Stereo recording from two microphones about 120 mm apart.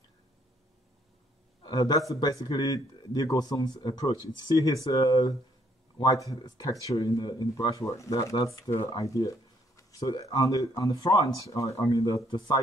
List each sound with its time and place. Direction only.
1.6 s a man's voice: 35° left (ahead or behind)
12.3 s speech: 40° left (ahead or behind)